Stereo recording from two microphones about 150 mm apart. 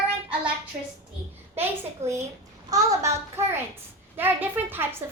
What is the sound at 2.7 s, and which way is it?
A child's voice, 20° right (ahead or behind).